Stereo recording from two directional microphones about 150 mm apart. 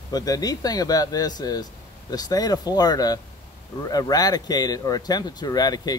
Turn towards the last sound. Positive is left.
turn(degrees=25)  # may be behind; listen again after turning